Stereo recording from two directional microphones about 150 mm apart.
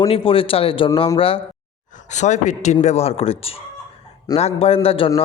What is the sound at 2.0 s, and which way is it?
A man's voice, 50° left (ahead or behind).